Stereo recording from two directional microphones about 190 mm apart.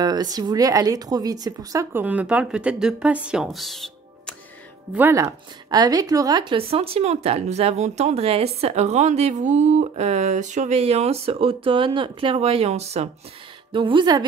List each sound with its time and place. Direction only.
0.0 s speech: 20° right (ahead or behind); by 4.4 s centre (ahead or behind)
4.9 s a woman's voice: 15° right (ahead or behind)